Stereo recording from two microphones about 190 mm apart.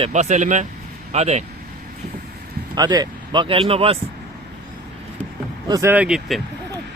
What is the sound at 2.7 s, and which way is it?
Speech, 20° right (ahead or behind).